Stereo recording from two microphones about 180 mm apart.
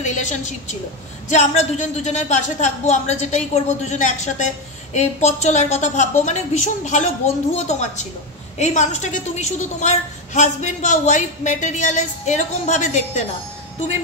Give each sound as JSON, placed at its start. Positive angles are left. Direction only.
{"t": 0.0, "sound": "a woman's voice", "side_deg": 40}